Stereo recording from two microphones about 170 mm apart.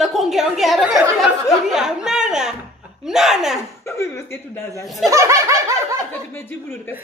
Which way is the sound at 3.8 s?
15° left (ahead or behind).